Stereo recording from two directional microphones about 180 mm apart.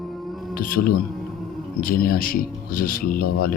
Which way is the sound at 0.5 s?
55° left (ahead or behind).